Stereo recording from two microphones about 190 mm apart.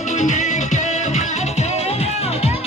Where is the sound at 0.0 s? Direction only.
40° left (ahead or behind).